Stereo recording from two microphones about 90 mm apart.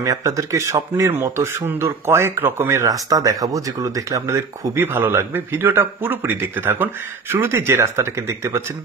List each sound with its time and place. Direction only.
0.0 s speech: 35° right (ahead or behind)
4.7 s a man's voice: 25° right (ahead or behind)